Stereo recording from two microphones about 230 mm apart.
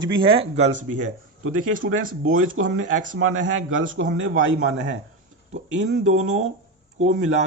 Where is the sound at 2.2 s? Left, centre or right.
Right.